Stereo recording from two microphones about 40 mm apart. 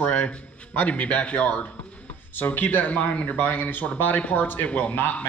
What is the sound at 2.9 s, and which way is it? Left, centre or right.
Speech, left.